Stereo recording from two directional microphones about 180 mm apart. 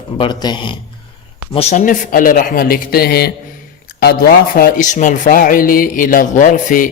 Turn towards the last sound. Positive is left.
turn(degrees=45)  # may be behind; listen again after turning